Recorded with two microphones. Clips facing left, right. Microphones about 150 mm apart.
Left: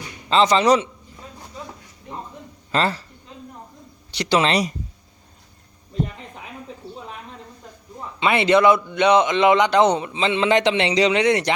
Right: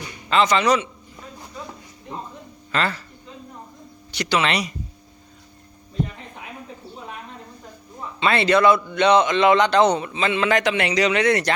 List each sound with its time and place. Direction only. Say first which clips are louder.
0.3 s a man's voice: left 2 dB; 30° left (ahead or behind)
2.7 s a man's voice: left 3 dB; 35° left (ahead or behind)
4.1 s a man's voice: left 3 dB; 30° left (ahead or behind)
8.2 s a man's voice: left 1 dB; 20° left (ahead or behind)